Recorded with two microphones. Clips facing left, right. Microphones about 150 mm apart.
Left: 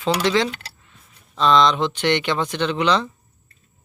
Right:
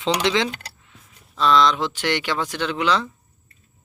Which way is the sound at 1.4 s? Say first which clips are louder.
Left 1 dB; 5° right (ahead or behind).